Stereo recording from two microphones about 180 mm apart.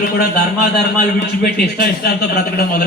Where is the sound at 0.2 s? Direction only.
60° left (ahead or behind).